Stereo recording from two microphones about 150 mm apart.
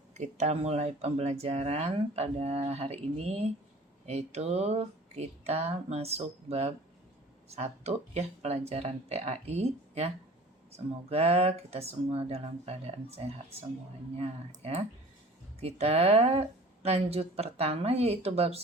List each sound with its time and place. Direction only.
0.1 s speech: 50° right (ahead or behind)